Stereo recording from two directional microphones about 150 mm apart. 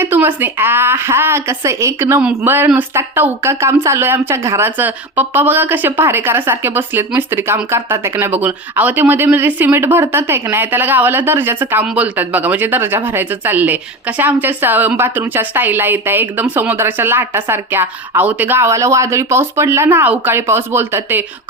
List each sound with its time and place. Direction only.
0.0 s speech: 15° right (ahead or behind)